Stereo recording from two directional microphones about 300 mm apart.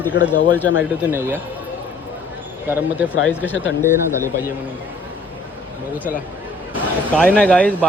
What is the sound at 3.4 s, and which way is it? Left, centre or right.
Speech, left.